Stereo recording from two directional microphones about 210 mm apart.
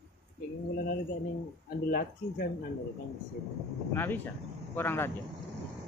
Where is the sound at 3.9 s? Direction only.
10° left (ahead or behind).